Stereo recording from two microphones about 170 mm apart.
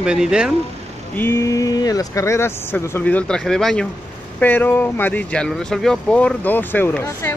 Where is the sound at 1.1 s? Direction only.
15° left (ahead or behind).